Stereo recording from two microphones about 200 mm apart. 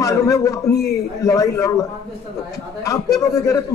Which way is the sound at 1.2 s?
15° left (ahead or behind).